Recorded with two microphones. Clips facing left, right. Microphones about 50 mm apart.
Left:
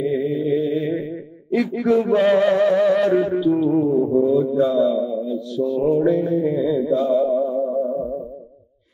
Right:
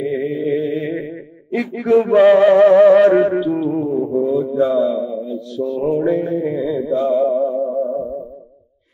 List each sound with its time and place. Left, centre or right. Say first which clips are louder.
0.0 s a sound: right 1 dB; right
3.8 s mantra: left 1 dB; centre
5.8 s music: even; right
7.6 s music: right 2 dB; centre